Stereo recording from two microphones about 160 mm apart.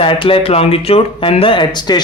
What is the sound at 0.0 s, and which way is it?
Speech, 35° left (ahead or behind).